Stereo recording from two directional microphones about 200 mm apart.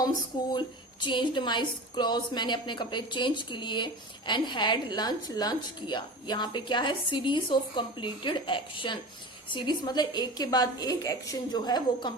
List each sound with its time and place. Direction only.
0.5 s a woman's voice: 25° left (ahead or behind)